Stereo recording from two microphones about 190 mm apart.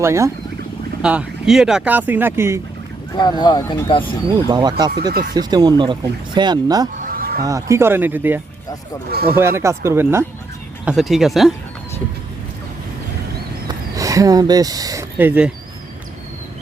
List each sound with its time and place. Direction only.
0.0 s speech: 15° right (ahead or behind)
1.0 s speech: 5° right (ahead or behind)
3.1 s speech: 25° left (ahead or behind)
4.4 s speech: 20° right (ahead or behind)
7.0 s a sound: 50° right (ahead or behind)
7.4 s speech: 15° right (ahead or behind)
9.0 s speech: 55° right (ahead or behind)
9.3 s speech: 15° right (ahead or behind)
10.8 s speech: centre (ahead or behind)
13.7 s speech: 20° right (ahead or behind)